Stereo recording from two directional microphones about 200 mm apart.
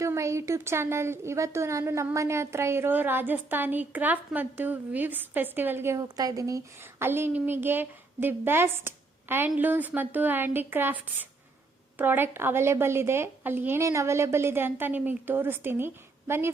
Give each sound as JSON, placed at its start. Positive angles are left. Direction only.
{"t": 0.0, "sound": "a woman's voice", "side_deg": -15}